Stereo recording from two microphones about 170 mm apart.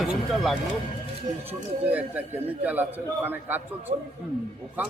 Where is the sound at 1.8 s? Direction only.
10° right (ahead or behind).